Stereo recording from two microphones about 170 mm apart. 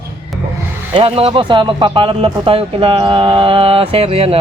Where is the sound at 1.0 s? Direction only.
35° right (ahead or behind).